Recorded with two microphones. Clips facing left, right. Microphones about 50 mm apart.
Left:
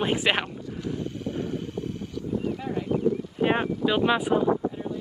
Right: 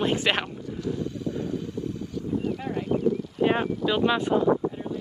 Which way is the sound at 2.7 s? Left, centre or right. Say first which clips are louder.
Left 2 dB; right.